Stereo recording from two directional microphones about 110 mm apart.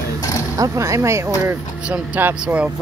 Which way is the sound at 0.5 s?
30° right (ahead or behind).